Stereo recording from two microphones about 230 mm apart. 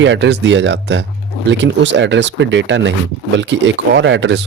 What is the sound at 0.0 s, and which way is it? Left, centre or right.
Speech, right.